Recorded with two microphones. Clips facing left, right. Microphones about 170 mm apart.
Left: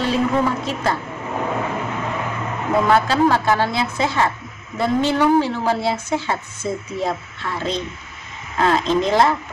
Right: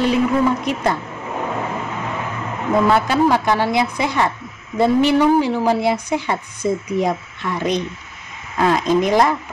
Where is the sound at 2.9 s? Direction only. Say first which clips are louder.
Left 1 dB; 15° right (ahead or behind).